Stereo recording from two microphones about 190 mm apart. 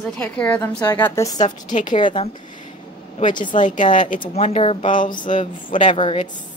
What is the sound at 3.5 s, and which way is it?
Speech, 40° left (ahead or behind).